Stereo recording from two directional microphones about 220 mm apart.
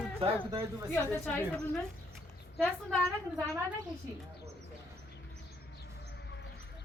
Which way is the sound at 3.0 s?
10° right (ahead or behind).